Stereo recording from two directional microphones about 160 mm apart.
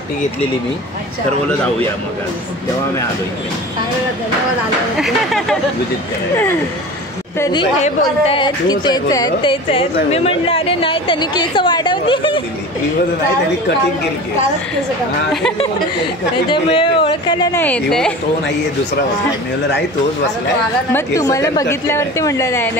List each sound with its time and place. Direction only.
4.9 s speech: centre (ahead or behind)
7.3 s a woman's voice: 20° left (ahead or behind)
7.8 s a woman's voice: 35° left (ahead or behind)
16.4 s speech: 35° left (ahead or behind)
17.6 s speech: 10° left (ahead or behind)
20.9 s a woman's voice: 20° left (ahead or behind)